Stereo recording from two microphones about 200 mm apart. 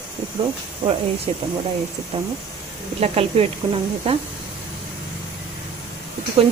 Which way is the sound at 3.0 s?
30° right (ahead or behind).